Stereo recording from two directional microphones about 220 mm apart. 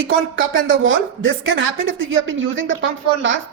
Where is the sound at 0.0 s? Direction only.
60° right (ahead or behind).